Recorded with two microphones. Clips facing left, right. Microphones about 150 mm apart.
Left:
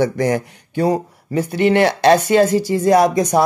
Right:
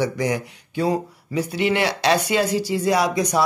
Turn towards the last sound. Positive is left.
turn(degrees=50)  # may be behind; listen again after turning